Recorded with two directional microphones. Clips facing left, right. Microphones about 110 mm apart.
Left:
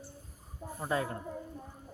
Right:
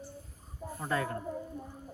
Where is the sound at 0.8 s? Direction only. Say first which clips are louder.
Even; 15° left (ahead or behind).